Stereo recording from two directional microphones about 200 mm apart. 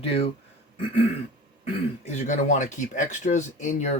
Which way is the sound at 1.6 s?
35° left (ahead or behind).